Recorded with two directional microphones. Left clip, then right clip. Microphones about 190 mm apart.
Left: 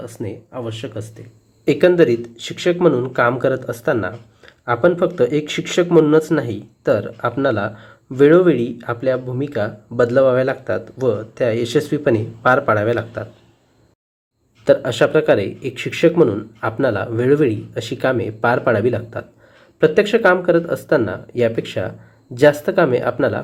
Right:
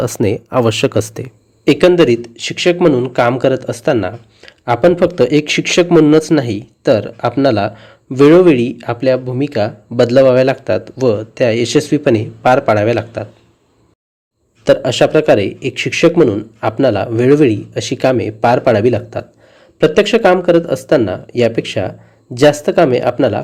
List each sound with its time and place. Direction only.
0.0 s speech: 45° right (ahead or behind)
1.6 s speech: 25° right (ahead or behind)
14.7 s speech: 25° right (ahead or behind)